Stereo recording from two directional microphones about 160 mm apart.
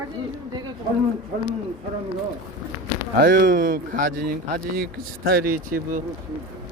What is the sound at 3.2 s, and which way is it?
Speech, 60° right (ahead or behind).